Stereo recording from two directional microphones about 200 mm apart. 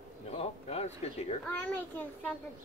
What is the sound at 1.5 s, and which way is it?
Speech, 10° left (ahead or behind).